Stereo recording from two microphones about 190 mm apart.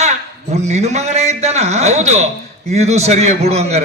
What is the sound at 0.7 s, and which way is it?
A man's voice, 35° right (ahead or behind).